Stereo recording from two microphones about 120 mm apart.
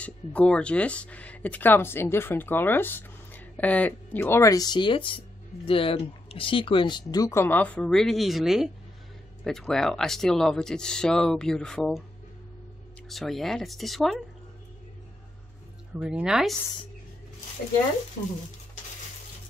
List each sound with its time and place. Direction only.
0.0 s speech: 10° left (ahead or behind)
13.1 s speech: centre (ahead or behind)
16.0 s a woman's voice: 10° right (ahead or behind)